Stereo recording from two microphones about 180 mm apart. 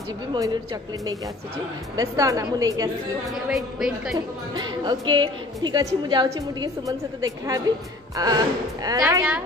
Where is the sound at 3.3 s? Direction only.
5° right (ahead or behind).